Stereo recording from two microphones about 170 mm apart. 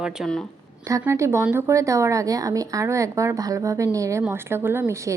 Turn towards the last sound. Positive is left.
turn(degrees=-15)  # may be behind; listen again after turning